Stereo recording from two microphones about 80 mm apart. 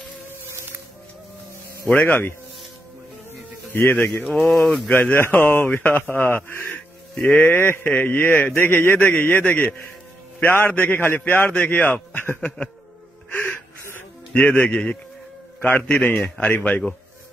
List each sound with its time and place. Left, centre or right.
2.0 s a man's voice: left
3.7 s a man's voice: left
4.5 s speech: centre
4.8 s a man's voice: centre
5.3 s a man's voice: left
10.4 s a man's voice: left
14.3 s a man's voice: left